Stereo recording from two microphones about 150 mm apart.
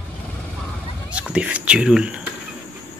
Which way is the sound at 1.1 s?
10° right (ahead or behind).